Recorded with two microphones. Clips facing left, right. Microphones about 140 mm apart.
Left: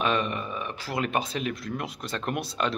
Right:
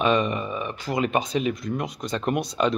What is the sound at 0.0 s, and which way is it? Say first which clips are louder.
Speech: right 5 dB; centre (ahead or behind).